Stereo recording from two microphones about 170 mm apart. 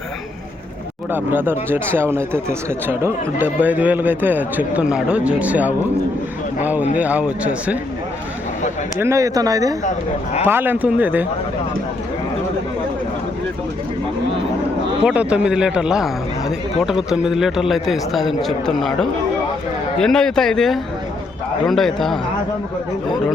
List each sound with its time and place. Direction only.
1.1 s speech: 10° right (ahead or behind)
9.0 s speech: 15° right (ahead or behind)
15.0 s a man's voice: 5° right (ahead or behind)